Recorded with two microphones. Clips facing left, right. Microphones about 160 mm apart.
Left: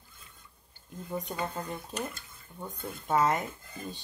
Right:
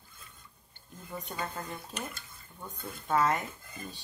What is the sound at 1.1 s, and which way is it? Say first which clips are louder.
Speech: left 4 dB; 20° left (ahead or behind).